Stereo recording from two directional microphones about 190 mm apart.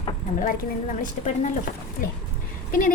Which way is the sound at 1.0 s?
40° left (ahead or behind).